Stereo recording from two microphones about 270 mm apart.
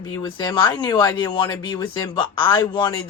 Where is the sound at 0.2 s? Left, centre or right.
Centre.